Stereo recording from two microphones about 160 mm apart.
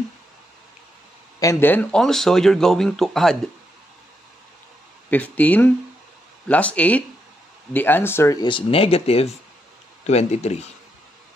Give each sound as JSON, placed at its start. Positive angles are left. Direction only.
{"t": 1.4, "sound": "speech", "side_deg": 15}
{"t": 5.1, "sound": "speech", "side_deg": 10}